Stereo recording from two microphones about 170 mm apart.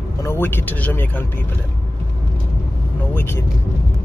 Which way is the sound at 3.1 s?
15° left (ahead or behind).